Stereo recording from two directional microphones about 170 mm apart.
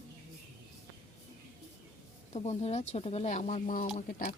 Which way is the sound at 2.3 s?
40° left (ahead or behind).